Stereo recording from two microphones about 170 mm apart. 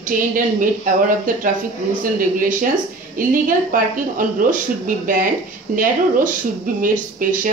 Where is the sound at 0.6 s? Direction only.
55° right (ahead or behind).